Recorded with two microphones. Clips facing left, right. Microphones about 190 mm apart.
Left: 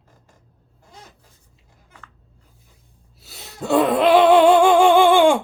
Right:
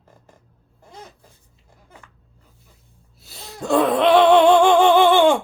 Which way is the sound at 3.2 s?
5° left (ahead or behind).